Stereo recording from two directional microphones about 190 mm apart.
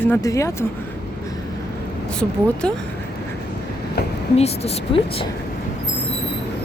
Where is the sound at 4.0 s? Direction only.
60° left (ahead or behind).